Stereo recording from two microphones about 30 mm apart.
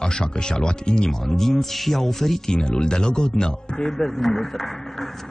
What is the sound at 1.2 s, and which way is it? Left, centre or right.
Speech, centre.